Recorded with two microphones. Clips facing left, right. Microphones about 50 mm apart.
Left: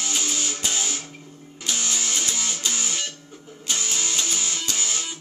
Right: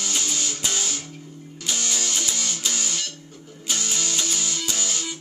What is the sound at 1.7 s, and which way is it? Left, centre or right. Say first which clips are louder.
Music: even; centre.